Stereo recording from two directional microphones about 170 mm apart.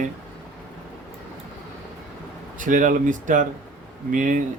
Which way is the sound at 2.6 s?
50° right (ahead or behind).